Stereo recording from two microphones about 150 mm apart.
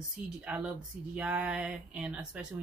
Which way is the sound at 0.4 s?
5° right (ahead or behind).